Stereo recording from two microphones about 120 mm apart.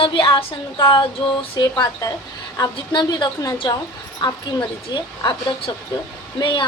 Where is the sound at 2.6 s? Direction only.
35° left (ahead or behind).